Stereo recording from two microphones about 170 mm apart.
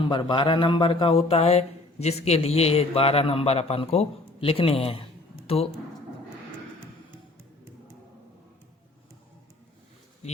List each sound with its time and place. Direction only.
0.0 s speech: 30° left (ahead or behind)